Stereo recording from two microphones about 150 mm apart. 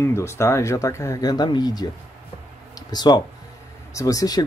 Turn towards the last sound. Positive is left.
turn(degrees=25)  # may be behind; listen again after turning